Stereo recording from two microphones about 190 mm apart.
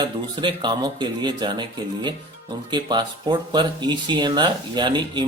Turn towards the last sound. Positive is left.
turn(degrees=-25)  # may be behind; listen again after turning